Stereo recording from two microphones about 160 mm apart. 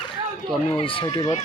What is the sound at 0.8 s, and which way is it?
Speech, 35° left (ahead or behind).